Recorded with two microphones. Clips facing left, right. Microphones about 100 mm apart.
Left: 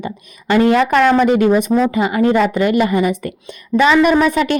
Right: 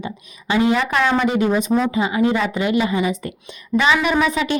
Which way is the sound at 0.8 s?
45° left (ahead or behind).